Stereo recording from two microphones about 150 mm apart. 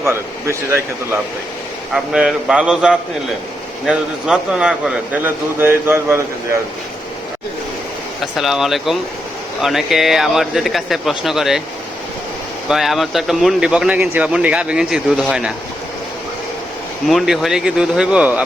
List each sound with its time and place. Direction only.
0.0 s a man's voice: 20° right (ahead or behind)
1.9 s a man's voice: 5° right (ahead or behind)
8.2 s speech: centre (ahead or behind)
12.6 s speech: centre (ahead or behind)
17.1 s speech: centre (ahead or behind)